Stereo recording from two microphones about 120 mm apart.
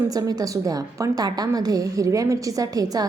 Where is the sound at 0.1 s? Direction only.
30° right (ahead or behind).